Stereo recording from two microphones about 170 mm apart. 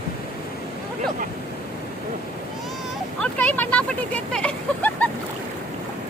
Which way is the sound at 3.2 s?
10° left (ahead or behind).